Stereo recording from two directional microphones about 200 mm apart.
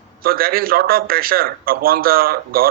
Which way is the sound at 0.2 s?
50° right (ahead or behind).